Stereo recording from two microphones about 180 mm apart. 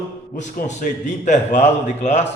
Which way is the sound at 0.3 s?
40° left (ahead or behind).